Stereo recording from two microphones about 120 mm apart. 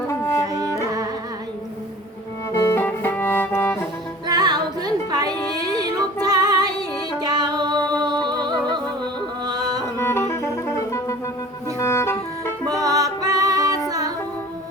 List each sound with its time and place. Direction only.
0.1 s music: 25° left (ahead or behind)
0.4 s music: 30° right (ahead or behind)
2.5 s music: 20° left (ahead or behind)
4.3 s music: 35° right (ahead or behind)
6.2 s female singing: 35° right (ahead or behind)
6.7 s music: 35° right (ahead or behind)
10.0 s music: 20° left (ahead or behind)
12.6 s music: 30° right (ahead or behind)